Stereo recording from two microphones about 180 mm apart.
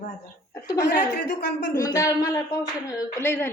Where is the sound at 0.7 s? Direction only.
70° left (ahead or behind).